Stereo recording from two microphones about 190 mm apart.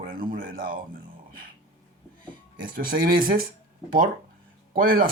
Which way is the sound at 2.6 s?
50° right (ahead or behind).